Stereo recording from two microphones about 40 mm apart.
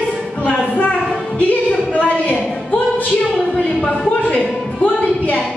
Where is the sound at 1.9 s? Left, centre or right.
Left.